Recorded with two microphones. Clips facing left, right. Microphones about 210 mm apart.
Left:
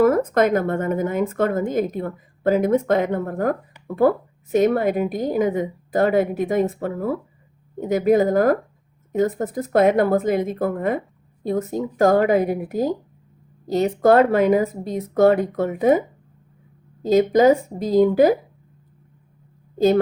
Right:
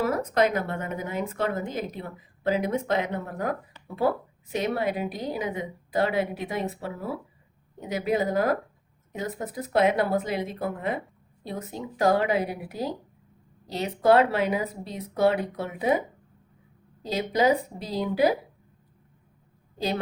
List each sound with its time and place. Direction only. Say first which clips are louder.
0.0 s speech: left 7 dB; 50° left (ahead or behind)